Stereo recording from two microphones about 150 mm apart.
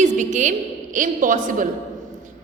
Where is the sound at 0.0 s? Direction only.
55° right (ahead or behind).